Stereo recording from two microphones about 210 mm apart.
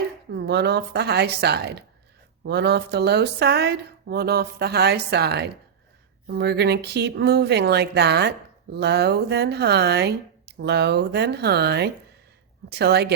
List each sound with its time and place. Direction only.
0.3 s speech: 50° right (ahead or behind)